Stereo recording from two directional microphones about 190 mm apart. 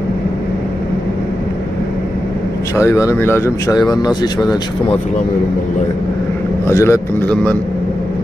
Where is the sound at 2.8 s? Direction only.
15° left (ahead or behind).